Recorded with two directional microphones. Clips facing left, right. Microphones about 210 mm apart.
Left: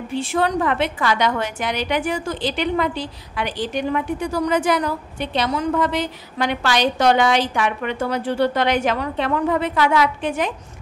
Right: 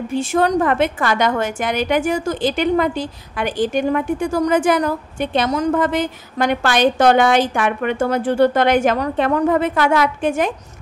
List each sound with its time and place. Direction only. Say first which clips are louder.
0.1 s a woman's voice: right 4 dB; 45° right (ahead or behind)